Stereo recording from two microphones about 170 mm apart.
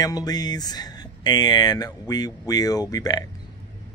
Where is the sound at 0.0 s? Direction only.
20° left (ahead or behind).